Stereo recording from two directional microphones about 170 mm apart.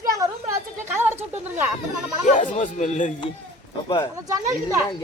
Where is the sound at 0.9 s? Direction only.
10° right (ahead or behind).